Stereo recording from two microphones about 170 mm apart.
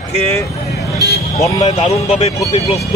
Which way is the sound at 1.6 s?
35° left (ahead or behind).